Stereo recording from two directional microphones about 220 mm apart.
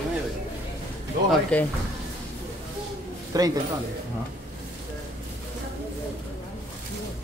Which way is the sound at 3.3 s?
15° right (ahead or behind).